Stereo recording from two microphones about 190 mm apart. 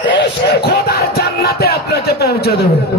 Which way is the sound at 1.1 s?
55° left (ahead or behind).